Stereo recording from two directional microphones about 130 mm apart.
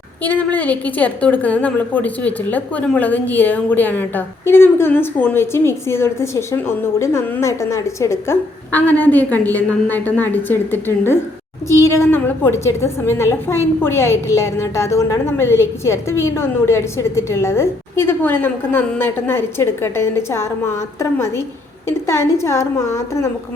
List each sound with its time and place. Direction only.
0.2 s a woman's voice: 10° left (ahead or behind)